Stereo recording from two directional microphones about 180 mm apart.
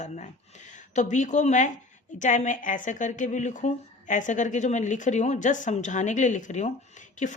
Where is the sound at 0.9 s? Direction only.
45° left (ahead or behind).